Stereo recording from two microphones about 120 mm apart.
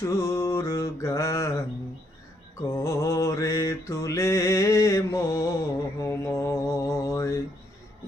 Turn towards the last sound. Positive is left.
turn(degrees=25)  # may be behind; listen again after turning